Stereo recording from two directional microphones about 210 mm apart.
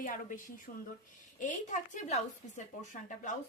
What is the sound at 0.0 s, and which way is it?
Speech, 40° left (ahead or behind).